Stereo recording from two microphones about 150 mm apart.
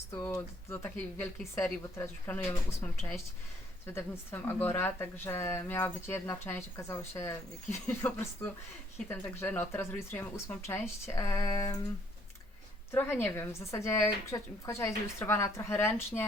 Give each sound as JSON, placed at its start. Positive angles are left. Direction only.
{"t": 0.1, "sound": "speech", "side_deg": 20}
{"t": 12.9, "sound": "speech", "side_deg": 15}